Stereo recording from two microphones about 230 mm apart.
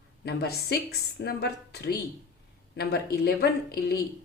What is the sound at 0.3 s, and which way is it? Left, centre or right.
Speech, left.